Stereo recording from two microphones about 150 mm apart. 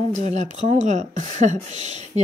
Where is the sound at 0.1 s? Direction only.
50° right (ahead or behind).